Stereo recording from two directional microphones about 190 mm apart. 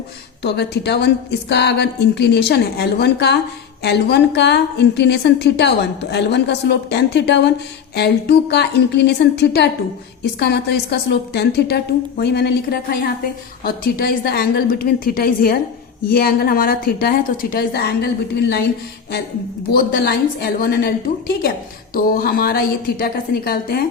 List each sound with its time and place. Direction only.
0.4 s a woman's voice: 60° left (ahead or behind)
19.7 s a woman's voice: 55° left (ahead or behind)